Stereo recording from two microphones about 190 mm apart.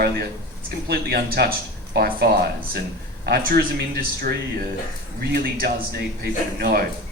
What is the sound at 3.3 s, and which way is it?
Speech, 50° right (ahead or behind).